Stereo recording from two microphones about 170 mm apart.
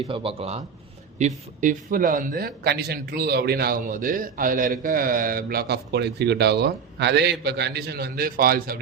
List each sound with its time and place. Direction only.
0.0 s a man's voice: 30° right (ahead or behind)
1.6 s a man's voice: 55° right (ahead or behind)